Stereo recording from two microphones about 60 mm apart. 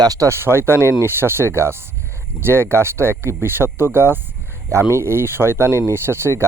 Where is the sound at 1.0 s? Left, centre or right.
Right.